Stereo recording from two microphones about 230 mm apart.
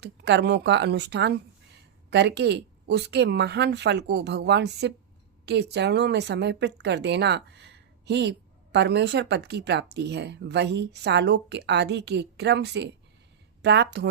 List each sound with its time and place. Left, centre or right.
0.0 s speech: right